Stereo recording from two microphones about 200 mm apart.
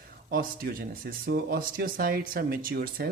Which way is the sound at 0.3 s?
45° right (ahead or behind).